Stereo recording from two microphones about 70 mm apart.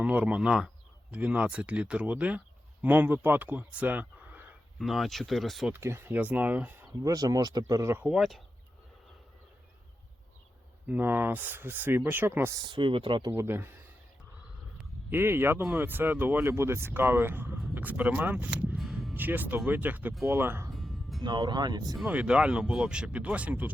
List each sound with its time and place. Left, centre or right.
0.0 s speech: centre
4.8 s speech: centre
5.7 s speech: right
6.1 s speech: right
7.0 s speech: right
8.1 s speech: centre
10.8 s speech: right
15.1 s speech: right
18.8 s music: centre
19.1 s speech: right
20.2 s speech: right
20.7 s music: centre
21.2 s speech: right
22.1 s speech: centre